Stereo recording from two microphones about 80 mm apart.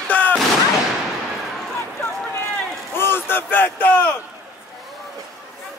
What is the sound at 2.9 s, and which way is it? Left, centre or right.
Speech, left.